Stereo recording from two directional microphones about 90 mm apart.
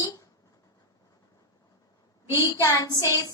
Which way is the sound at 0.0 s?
40° left (ahead or behind).